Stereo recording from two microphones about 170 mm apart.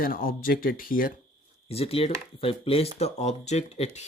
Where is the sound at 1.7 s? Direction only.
35° left (ahead or behind).